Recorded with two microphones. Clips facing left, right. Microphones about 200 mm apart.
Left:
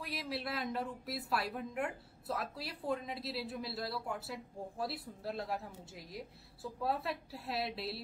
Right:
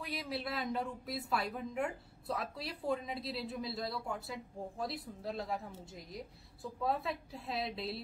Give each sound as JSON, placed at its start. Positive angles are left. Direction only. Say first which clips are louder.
{"t": 0.0, "sound": "speech", "louder": "right 1 dB", "side_deg": 0}